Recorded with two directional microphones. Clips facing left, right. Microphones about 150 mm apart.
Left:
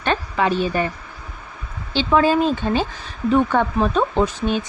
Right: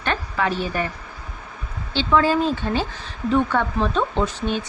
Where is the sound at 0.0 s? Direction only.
20° left (ahead or behind).